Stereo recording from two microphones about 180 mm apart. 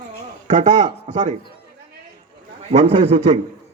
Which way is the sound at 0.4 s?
40° right (ahead or behind).